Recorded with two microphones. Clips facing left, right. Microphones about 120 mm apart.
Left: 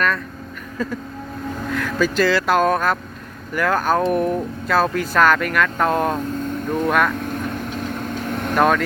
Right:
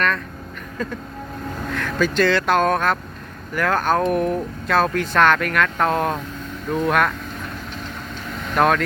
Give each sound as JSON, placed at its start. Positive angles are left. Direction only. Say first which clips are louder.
{"t": 1.6, "sound": "speech", "louder": "left 1 dB", "side_deg": 0}
{"t": 7.2, "sound": "vehicle", "louder": "left 7 dB", "side_deg": 55}
{"t": 8.5, "sound": "speech", "louder": "left 1 dB", "side_deg": 0}